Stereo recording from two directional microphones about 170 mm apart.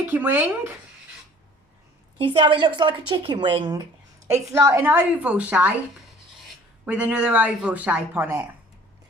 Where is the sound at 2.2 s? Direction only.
30° right (ahead or behind).